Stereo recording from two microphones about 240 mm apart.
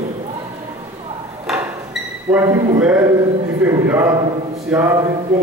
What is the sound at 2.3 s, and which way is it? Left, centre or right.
A man's voice, centre.